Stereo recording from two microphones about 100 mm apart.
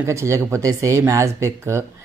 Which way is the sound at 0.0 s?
30° right (ahead or behind).